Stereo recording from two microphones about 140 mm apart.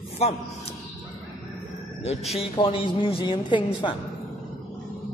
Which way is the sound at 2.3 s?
40° left (ahead or behind).